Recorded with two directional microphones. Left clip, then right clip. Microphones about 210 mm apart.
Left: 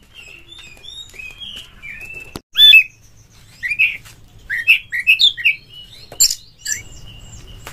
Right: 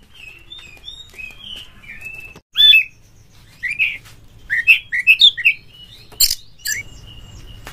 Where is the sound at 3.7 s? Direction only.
15° left (ahead or behind).